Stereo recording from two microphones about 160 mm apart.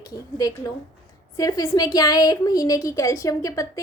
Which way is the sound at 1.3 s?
20° left (ahead or behind).